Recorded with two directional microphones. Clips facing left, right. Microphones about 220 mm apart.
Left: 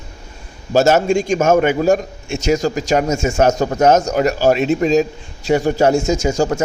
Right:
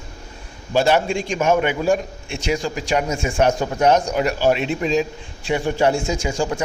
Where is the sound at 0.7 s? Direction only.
45° left (ahead or behind).